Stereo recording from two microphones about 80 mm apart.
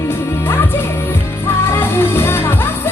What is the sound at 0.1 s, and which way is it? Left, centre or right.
Music, left.